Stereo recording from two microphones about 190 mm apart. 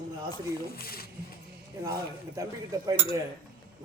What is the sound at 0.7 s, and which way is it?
Speech, 55° left (ahead or behind).